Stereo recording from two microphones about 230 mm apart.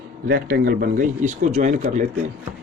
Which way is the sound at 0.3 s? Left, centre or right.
Right.